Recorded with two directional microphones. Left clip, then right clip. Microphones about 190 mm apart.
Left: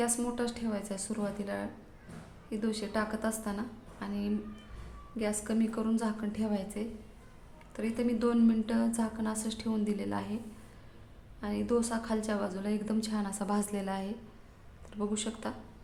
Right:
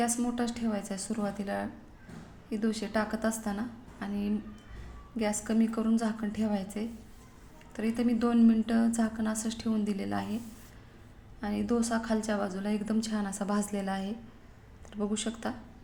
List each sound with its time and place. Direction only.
0.0 s a woman's voice: 5° right (ahead or behind)
11.3 s a woman's voice: 10° right (ahead or behind)